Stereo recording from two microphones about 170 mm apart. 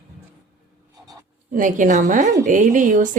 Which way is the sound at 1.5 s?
50° right (ahead or behind).